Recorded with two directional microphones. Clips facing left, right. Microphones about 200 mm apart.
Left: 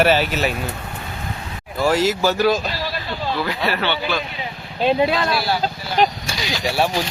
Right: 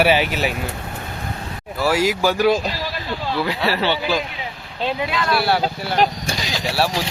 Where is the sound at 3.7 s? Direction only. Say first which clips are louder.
Right 2 dB; 30° right (ahead or behind).